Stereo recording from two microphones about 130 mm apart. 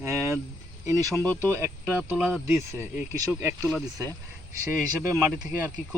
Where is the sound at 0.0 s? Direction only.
20° right (ahead or behind).